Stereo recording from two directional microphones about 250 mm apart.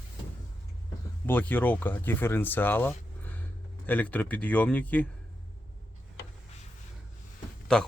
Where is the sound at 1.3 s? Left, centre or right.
Centre.